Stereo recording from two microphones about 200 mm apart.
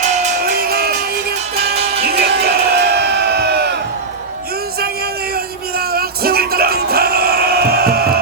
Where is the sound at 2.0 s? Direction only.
50° right (ahead or behind).